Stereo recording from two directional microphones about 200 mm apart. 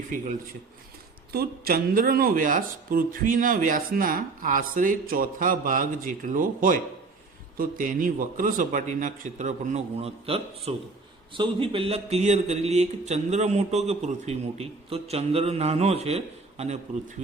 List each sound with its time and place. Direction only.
1.3 s speech: 50° right (ahead or behind); by 17.2 s 35° right (ahead or behind)